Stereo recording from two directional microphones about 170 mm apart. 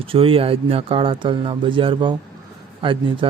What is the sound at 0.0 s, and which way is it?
Speech, 30° right (ahead or behind).